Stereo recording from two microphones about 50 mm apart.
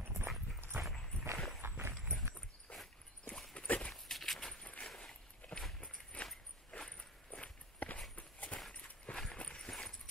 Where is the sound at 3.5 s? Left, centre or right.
Left.